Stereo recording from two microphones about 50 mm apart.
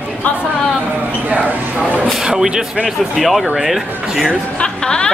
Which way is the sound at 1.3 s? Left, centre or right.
Right.